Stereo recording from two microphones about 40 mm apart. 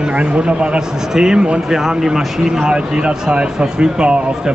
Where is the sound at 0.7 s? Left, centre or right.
Centre.